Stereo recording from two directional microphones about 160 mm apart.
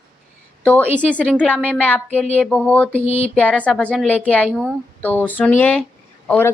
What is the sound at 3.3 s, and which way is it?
A woman's voice, 10° left (ahead or behind).